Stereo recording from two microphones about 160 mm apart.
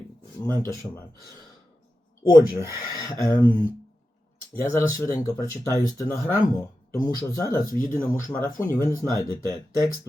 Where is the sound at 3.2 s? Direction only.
10° left (ahead or behind).